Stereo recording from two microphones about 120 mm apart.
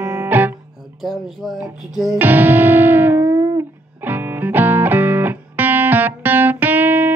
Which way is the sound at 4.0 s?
15° right (ahead or behind).